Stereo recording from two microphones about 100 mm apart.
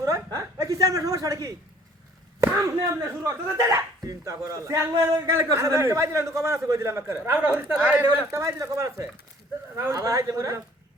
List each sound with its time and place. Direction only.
0.0 s a sound: 30° right (ahead or behind)
3.0 s speech: 25° right (ahead or behind)
8.3 s speech: 30° right (ahead or behind)